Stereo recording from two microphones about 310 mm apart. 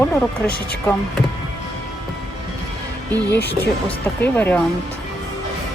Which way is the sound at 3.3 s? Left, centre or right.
Left.